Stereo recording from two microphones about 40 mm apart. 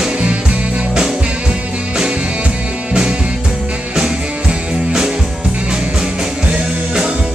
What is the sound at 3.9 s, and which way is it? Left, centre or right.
Music, right.